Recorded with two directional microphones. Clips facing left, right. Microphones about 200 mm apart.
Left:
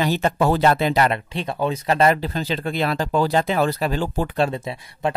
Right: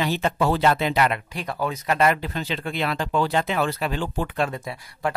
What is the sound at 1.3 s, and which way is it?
Speech, 25° left (ahead or behind).